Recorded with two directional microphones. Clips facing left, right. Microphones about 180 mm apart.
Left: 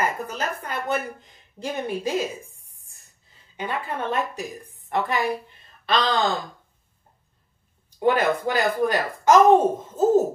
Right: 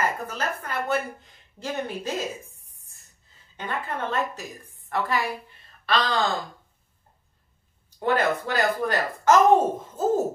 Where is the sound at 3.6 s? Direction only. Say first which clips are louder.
Left 2 dB; 15° left (ahead or behind).